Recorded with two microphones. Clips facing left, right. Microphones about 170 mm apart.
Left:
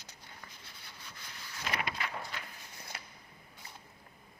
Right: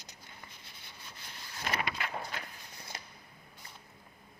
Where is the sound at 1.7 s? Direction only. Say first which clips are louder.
Right 2 dB; 55° right (ahead or behind).